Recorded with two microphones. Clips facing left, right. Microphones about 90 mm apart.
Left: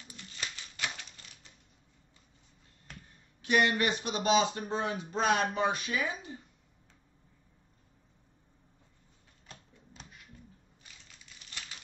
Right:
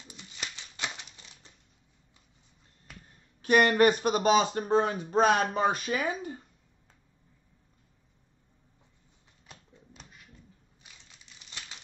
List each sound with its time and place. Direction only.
0.0 s a sound: 20° right (ahead or behind)
3.4 s speech: 50° right (ahead or behind)
10.8 s typewriter: 20° right (ahead or behind)